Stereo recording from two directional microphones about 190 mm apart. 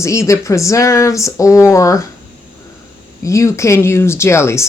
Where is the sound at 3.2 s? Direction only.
15° left (ahead or behind).